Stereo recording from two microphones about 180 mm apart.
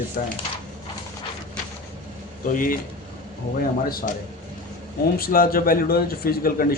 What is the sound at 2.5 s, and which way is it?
Speech, 50° left (ahead or behind).